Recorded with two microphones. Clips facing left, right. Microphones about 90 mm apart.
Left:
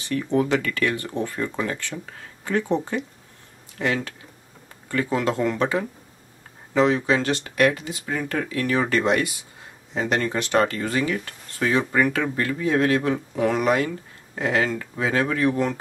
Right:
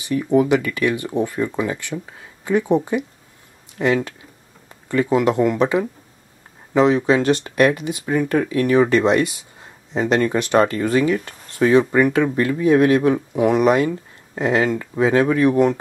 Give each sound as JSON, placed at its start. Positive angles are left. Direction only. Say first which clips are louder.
{"t": 0.0, "sound": "speech", "louder": "right 5 dB", "side_deg": -15}